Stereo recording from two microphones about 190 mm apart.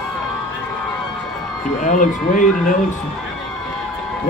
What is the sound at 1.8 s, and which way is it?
Speech, 45° left (ahead or behind).